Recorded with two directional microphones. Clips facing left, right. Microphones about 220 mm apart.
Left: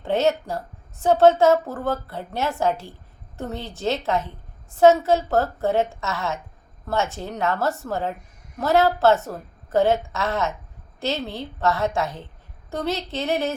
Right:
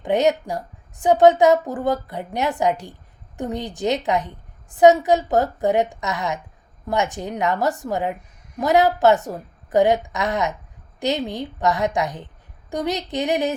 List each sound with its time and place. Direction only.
0.0 s a woman's voice: 15° right (ahead or behind)